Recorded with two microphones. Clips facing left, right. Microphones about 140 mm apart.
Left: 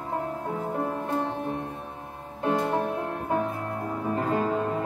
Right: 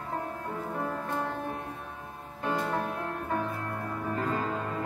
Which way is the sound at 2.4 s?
25° left (ahead or behind).